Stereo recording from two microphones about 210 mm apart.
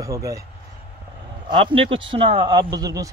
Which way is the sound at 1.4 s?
25° right (ahead or behind).